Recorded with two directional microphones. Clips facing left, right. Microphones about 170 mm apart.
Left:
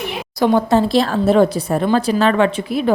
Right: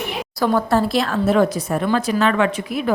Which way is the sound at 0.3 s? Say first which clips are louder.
Left 4 dB; 20° left (ahead or behind).